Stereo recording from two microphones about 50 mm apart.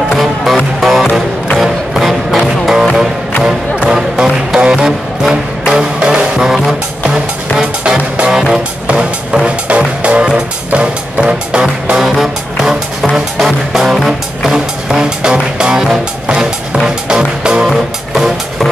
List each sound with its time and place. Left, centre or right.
0.1 s music: centre
7.8 s music: centre
12.0 s music: centre
17.6 s music: centre